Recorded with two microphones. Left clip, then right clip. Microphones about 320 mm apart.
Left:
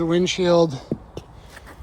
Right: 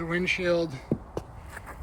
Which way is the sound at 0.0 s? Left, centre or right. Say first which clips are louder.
Left 7 dB; centre.